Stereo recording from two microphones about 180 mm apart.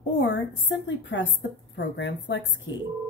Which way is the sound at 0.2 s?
90° left.